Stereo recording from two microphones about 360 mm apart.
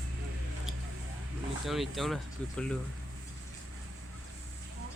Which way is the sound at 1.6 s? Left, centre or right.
Centre.